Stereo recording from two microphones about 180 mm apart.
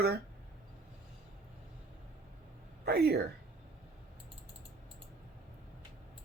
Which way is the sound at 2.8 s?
60° right (ahead or behind).